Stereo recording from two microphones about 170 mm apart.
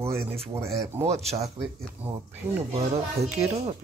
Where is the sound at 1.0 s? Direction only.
40° right (ahead or behind).